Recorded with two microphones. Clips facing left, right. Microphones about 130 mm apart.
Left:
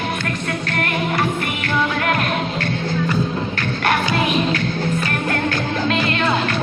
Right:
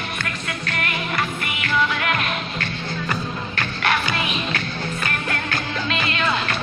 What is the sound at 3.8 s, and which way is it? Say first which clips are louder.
Music: left 4 dB; 45° left (ahead or behind).